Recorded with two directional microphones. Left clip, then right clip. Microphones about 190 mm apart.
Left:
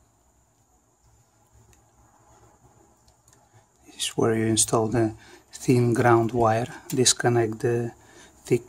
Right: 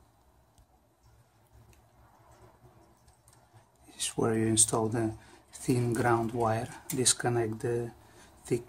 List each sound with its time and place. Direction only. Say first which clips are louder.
3.8 s speech: left 7 dB; 40° left (ahead or behind)